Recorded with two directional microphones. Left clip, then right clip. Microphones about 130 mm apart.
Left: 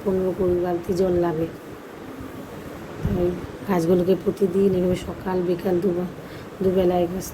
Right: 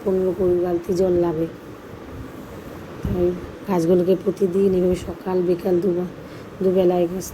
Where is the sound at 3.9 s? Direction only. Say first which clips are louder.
Right 3 dB; 5° right (ahead or behind).